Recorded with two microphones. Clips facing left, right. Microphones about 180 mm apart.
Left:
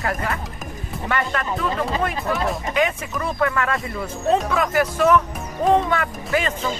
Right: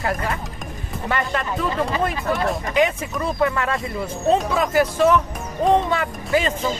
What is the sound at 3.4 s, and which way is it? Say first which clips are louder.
Speech: even; 25° right (ahead or behind).